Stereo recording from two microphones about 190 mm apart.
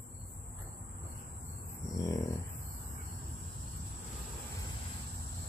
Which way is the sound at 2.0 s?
20° left (ahead or behind).